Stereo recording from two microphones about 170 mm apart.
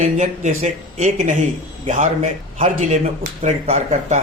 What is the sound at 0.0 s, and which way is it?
Speech, 45° right (ahead or behind).